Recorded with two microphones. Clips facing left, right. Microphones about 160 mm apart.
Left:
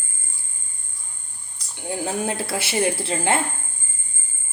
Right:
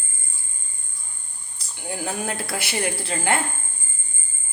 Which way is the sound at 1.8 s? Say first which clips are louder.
Left 3 dB; 25° left (ahead or behind).